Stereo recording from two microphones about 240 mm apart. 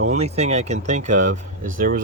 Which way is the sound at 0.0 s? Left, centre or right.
Right.